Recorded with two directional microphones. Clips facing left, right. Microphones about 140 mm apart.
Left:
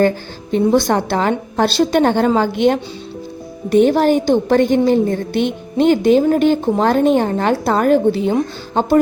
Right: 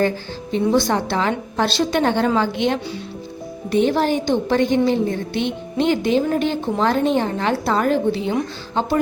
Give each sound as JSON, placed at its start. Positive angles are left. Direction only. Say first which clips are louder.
{"t": 0.5, "sound": "a woman's voice", "louder": "left 4 dB", "side_deg": 50}